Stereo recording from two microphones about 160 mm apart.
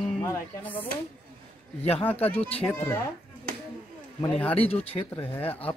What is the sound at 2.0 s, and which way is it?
Speech, 10° left (ahead or behind).